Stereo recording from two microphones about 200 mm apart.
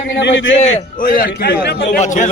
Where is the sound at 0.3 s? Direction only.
65° left (ahead or behind).